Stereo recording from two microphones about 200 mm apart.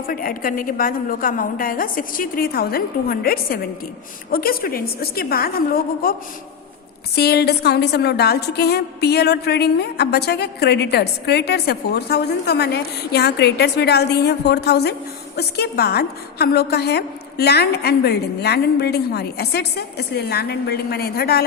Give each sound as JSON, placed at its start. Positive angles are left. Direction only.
{"t": 0.1, "sound": "a woman's voice", "side_deg": 45}
{"t": 7.2, "sound": "a woman's voice", "side_deg": 55}